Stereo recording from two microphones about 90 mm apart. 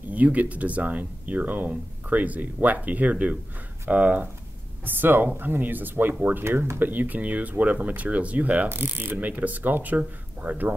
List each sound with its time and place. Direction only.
0.1 s speech: 15° right (ahead or behind)